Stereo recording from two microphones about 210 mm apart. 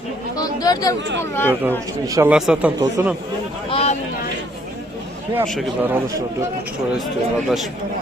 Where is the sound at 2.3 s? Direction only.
5° right (ahead or behind).